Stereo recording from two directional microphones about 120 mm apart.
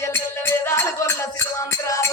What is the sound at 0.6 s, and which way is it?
Music, 20° left (ahead or behind).